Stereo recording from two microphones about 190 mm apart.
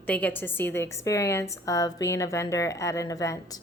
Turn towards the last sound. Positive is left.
turn(degrees=15)  # may be behind; listen again after turning